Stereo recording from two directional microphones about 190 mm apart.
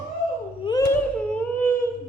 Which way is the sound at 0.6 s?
20° left (ahead or behind).